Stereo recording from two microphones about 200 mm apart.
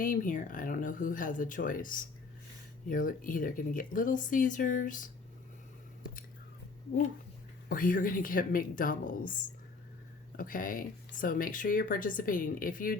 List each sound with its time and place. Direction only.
0.0 s speech: 40° left (ahead or behind)
7.7 s speech: 45° left (ahead or behind)